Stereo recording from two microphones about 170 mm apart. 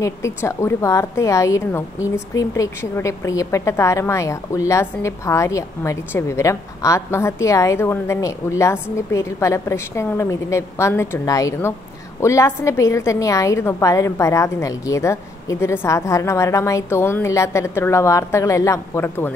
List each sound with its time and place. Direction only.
0.0 s a woman's voice: 15° left (ahead or behind)